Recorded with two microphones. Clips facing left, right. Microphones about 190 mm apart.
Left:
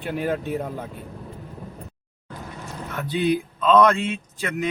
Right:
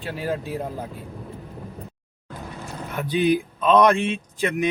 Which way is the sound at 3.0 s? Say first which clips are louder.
Right 2 dB; 15° right (ahead or behind).